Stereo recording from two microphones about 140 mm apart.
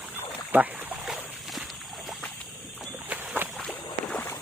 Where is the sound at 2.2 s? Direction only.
10° left (ahead or behind).